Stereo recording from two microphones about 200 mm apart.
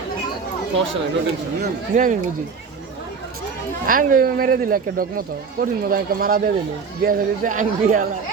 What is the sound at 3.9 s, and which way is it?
A man's voice, 45° right (ahead or behind).